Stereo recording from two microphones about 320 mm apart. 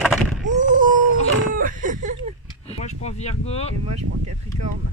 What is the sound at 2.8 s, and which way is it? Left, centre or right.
Cutlery, left.